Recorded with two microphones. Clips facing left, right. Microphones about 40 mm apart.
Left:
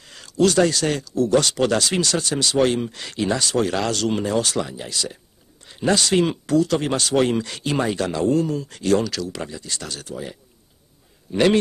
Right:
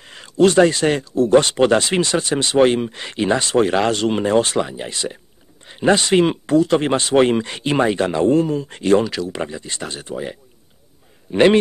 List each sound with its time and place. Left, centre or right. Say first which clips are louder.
0.0 s a man's voice: right 4 dB; right